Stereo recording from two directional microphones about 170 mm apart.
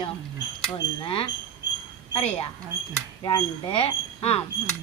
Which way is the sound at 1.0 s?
30° left (ahead or behind).